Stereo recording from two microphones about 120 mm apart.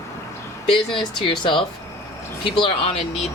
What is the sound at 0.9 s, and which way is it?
Speech, 45° left (ahead or behind).